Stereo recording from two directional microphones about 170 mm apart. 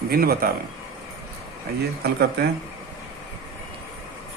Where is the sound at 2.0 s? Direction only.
70° right (ahead or behind).